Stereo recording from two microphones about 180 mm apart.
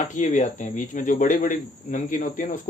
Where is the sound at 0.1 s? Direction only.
45° left (ahead or behind).